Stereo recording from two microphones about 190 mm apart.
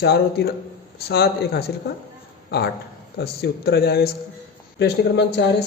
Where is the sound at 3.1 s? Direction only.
55° left (ahead or behind).